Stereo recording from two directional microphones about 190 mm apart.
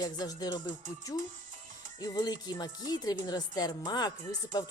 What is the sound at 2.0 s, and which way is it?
Speech, 20° left (ahead or behind).